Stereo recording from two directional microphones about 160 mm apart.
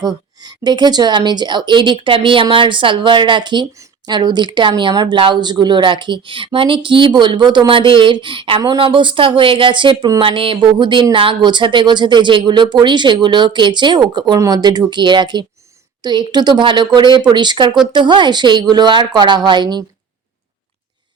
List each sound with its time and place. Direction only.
0.0 s speech: 25° right (ahead or behind)